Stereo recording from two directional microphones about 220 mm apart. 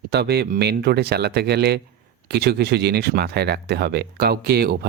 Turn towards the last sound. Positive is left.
turn(degrees=-45)  # may be behind; listen again after turning